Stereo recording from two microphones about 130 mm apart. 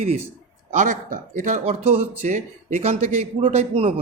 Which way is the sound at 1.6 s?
50° right (ahead or behind).